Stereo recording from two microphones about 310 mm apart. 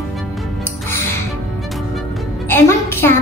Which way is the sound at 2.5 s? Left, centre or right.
Centre.